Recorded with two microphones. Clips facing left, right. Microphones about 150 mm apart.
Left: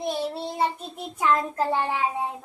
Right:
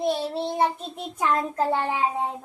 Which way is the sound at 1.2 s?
20° right (ahead or behind).